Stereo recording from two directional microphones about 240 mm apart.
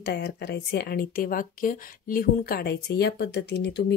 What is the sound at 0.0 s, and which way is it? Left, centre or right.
Speech, left.